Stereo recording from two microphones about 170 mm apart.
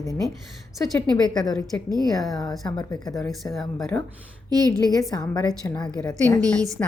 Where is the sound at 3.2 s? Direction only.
Centre (ahead or behind).